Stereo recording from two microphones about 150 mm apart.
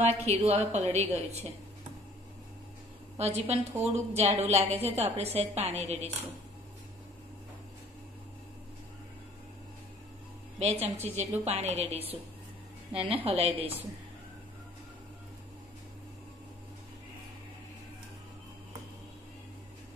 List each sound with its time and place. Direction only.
0.0 s a woman's voice: 45° right (ahead or behind)
3.2 s a woman's voice: 45° right (ahead or behind)
10.6 s a woman's voice: 50° right (ahead or behind)